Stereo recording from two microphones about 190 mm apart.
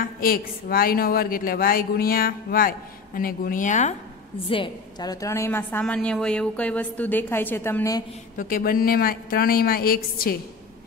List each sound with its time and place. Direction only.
0.0 s a woman's voice: 50° left (ahead or behind)
4.5 s a woman's voice: 25° left (ahead or behind)
8.4 s a woman's voice: 45° left (ahead or behind)